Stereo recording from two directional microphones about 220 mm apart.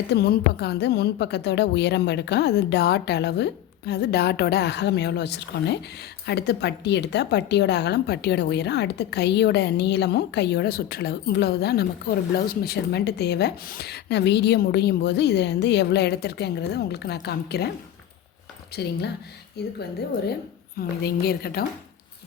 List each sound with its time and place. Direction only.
0.1 s a woman's voice: 50° left (ahead or behind)
18.7 s a woman's voice: 50° left (ahead or behind)
20.7 s a woman's voice: 45° left (ahead or behind)